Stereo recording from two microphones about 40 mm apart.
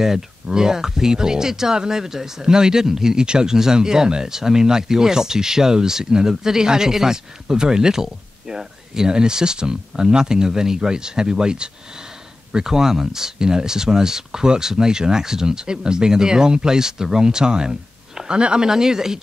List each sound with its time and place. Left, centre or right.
0.0 s speech: centre